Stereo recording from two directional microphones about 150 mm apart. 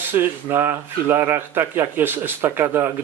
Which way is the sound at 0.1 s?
15° right (ahead or behind).